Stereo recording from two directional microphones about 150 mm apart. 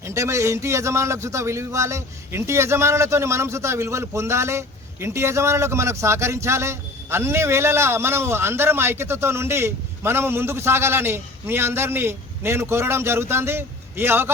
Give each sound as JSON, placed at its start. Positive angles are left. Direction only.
{"t": 0.0, "sound": "speech", "side_deg": -20}